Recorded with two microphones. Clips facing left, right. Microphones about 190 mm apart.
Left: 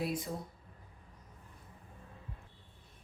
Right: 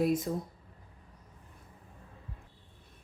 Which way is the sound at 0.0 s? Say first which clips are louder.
Right 8 dB; 45° right (ahead or behind).